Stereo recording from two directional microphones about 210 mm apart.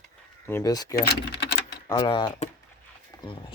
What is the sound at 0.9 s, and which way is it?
Speech, 50° left (ahead or behind).